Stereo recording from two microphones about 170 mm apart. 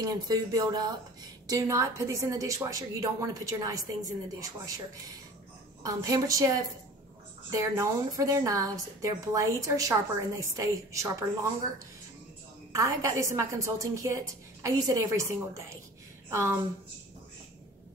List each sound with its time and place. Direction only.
0.0 s a woman's voice: 25° right (ahead or behind)
12.7 s a woman's voice: 20° right (ahead or behind)